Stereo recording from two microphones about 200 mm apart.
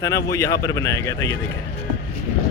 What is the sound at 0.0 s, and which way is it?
Speech, 15° left (ahead or behind).